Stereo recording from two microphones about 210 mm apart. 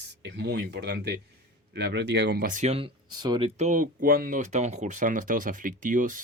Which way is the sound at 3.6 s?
40° right (ahead or behind).